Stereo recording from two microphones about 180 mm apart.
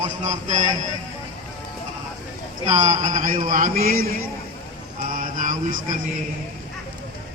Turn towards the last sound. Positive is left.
turn(degrees=-45)  # may be behind; listen again after turning